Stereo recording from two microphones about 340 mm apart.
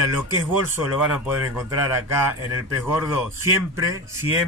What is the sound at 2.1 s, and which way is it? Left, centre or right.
Speech, centre.